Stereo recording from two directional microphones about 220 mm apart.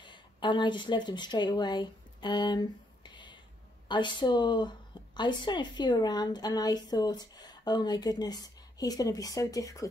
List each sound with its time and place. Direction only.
0.0 s speech: 20° left (ahead or behind)
3.9 s speech: 20° left (ahead or behind)